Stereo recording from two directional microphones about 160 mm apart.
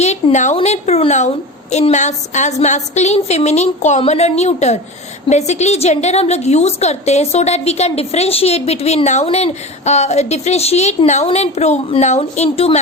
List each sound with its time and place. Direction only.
0.0 s a woman's voice: 45° left (ahead or behind)